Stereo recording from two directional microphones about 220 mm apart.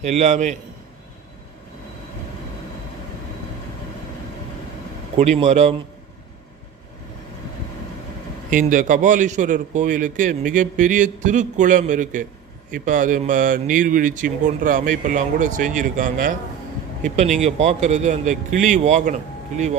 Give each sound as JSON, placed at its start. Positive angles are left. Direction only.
{"t": 0.0, "sound": "a man's voice", "side_deg": -30}
{"t": 5.1, "sound": "a man's voice", "side_deg": -30}
{"t": 8.4, "sound": "a man's voice", "side_deg": -40}